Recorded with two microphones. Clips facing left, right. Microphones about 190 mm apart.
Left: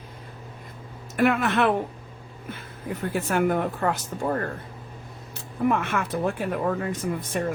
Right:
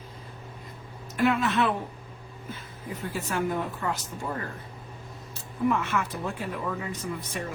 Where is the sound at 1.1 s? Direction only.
55° left (ahead or behind).